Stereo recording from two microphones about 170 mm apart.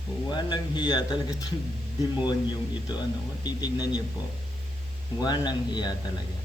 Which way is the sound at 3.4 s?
25° left (ahead or behind).